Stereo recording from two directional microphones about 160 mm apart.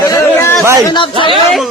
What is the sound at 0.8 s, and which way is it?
Speech, 30° left (ahead or behind).